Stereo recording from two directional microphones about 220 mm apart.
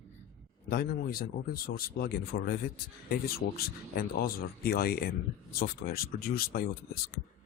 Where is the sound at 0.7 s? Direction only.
45° left (ahead or behind).